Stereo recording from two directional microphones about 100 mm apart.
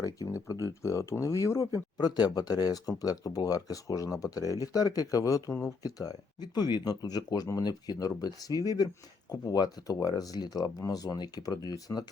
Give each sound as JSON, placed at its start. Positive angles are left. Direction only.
{"t": 0.0, "sound": "speech", "side_deg": 35}
{"t": 2.0, "sound": "speech", "side_deg": 45}